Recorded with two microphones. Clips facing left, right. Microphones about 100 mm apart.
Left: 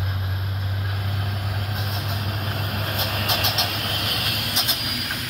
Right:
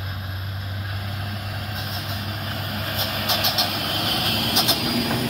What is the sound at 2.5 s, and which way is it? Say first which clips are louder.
Vehicle: even; 5° left (ahead or behind).